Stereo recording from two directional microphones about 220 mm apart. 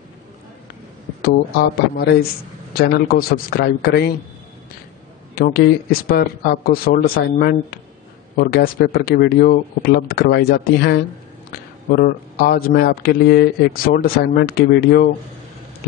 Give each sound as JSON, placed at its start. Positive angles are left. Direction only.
{"t": 1.2, "sound": "speech", "side_deg": 45}
{"t": 5.3, "sound": "speech", "side_deg": 45}